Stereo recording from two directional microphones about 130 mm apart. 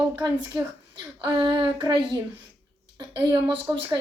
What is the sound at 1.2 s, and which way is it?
A woman's voice, 35° right (ahead or behind).